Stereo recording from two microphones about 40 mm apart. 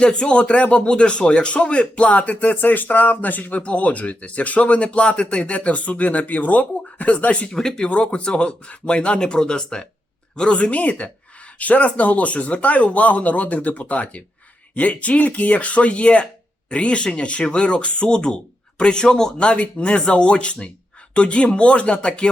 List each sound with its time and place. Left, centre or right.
0.0 s speech: left
3.6 s speech: left
7.5 s speech: centre